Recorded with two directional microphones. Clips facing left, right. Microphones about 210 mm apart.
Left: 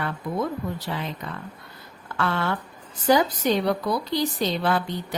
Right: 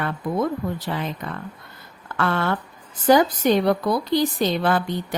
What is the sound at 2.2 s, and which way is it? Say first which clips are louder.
A woman's voice: right 3 dB; 50° right (ahead or behind).